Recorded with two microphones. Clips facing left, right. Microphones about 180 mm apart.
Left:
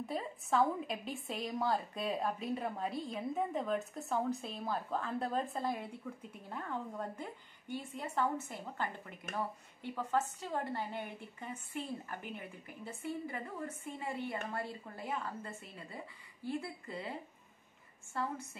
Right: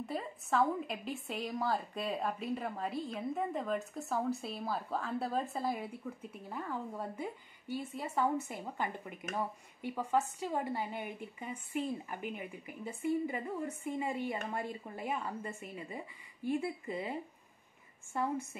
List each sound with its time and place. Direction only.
0.0 s a woman's voice: centre (ahead or behind); by 17.1 s 15° right (ahead or behind)
18.1 s a woman's voice: 15° right (ahead or behind)